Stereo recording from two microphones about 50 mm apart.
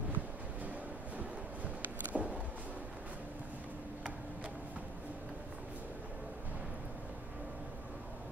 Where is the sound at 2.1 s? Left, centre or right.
Right.